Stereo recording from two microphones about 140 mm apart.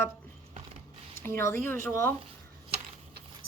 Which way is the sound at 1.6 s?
15° left (ahead or behind).